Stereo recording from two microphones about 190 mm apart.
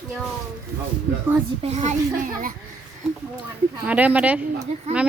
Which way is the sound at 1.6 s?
35° right (ahead or behind).